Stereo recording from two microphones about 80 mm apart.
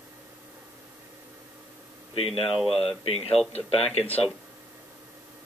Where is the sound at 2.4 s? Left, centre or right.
Centre.